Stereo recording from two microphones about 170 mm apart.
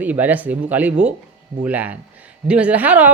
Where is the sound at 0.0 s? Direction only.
10° right (ahead or behind).